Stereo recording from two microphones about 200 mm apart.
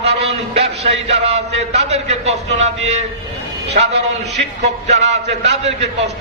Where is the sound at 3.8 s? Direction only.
40° right (ahead or behind).